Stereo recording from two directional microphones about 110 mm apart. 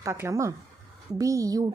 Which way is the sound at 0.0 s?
25° right (ahead or behind).